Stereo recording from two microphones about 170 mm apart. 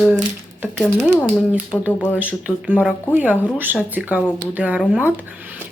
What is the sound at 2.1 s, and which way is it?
Speech, 10° right (ahead or behind).